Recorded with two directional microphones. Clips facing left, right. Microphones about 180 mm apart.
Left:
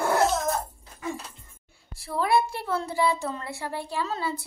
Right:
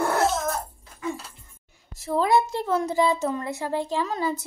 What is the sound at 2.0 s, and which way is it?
A woman's voice, 20° right (ahead or behind).